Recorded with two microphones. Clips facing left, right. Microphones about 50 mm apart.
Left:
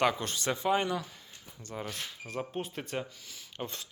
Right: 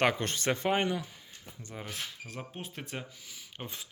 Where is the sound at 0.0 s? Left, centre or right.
Right.